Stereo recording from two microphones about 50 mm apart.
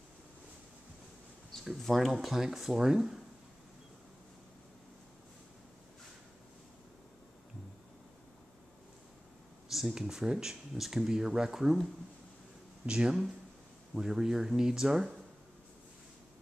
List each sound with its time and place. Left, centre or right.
1.8 s speech: centre
9.7 s a sound: centre
9.9 s speech: centre
12.8 s speech: centre